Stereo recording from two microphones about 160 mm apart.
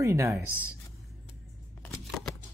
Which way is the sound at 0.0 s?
20° right (ahead or behind).